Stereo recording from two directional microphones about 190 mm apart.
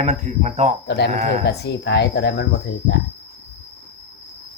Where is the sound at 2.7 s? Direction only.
70° left (ahead or behind).